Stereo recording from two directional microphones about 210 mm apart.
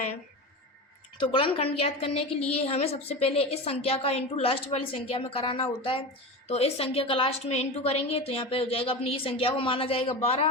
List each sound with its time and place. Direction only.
1.2 s a woman's voice: 25° left (ahead or behind)